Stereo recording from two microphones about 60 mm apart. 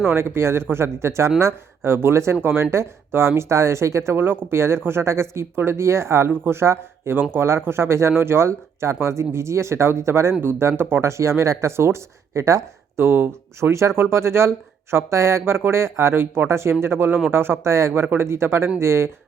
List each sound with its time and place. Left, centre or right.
0.1 s speech: right
13.0 s speech: right